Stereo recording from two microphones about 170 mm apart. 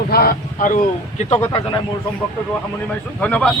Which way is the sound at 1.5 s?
25° left (ahead or behind).